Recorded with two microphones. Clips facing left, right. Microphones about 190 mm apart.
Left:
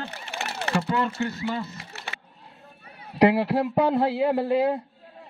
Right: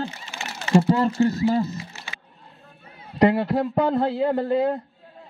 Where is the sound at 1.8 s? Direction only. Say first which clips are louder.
Right 2 dB; 65° left (ahead or behind).